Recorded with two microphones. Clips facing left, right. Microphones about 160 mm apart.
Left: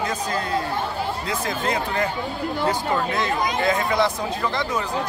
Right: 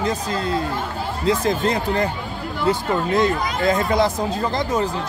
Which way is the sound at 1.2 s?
35° right (ahead or behind).